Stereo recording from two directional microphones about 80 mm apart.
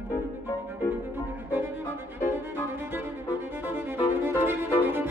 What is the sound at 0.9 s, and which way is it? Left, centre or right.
Music, right.